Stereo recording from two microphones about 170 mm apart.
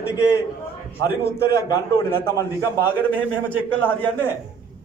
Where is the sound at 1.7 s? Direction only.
20° left (ahead or behind).